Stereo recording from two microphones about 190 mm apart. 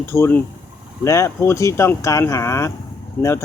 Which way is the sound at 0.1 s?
10° left (ahead or behind).